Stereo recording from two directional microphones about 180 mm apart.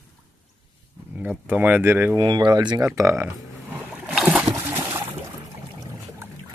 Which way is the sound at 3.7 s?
10° right (ahead or behind).